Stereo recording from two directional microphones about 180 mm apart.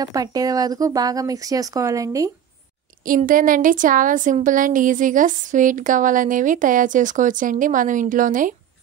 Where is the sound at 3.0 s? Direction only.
50° right (ahead or behind).